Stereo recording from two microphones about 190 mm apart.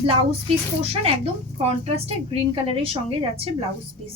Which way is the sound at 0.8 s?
30° right (ahead or behind).